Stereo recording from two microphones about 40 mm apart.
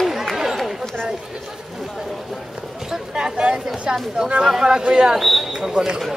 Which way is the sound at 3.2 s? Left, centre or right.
Centre.